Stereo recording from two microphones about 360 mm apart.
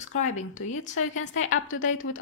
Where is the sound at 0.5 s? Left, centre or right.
Left.